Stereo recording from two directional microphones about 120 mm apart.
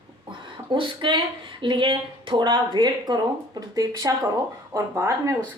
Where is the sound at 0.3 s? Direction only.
45° right (ahead or behind).